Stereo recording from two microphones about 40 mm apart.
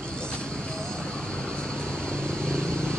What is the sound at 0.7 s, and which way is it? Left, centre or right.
Vehicle, centre.